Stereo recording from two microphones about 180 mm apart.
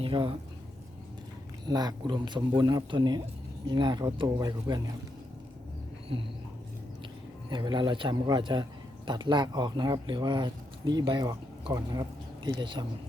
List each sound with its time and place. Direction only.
0.0 s speech: 25° right (ahead or behind)
1.6 s speech: 20° right (ahead or behind)
7.5 s speech: 25° right (ahead or behind)